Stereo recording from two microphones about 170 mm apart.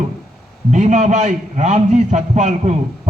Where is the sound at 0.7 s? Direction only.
45° right (ahead or behind).